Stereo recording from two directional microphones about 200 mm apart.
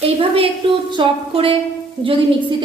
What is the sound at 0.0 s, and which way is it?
A woman's voice, 30° right (ahead or behind).